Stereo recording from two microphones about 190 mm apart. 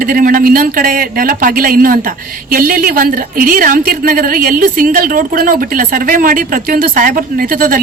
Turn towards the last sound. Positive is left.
turn(degrees=-50)  # may be behind; listen again after turning